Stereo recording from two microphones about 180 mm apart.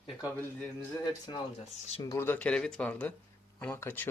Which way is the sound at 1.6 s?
35° left (ahead or behind).